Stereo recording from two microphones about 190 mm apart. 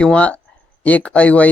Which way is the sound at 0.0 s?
5° left (ahead or behind).